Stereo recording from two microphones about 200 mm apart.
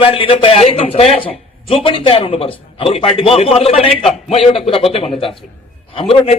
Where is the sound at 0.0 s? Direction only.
25° left (ahead or behind).